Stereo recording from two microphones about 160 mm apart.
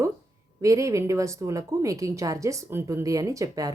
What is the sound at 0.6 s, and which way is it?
Speech, 20° right (ahead or behind).